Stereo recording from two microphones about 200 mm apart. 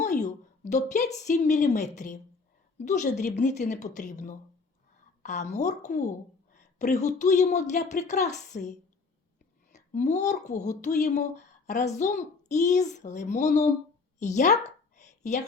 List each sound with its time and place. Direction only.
0.0 s a woman's voice: 35° left (ahead or behind)
9.7 s speech: 35° left (ahead or behind)
14.2 s a sound: 35° left (ahead or behind)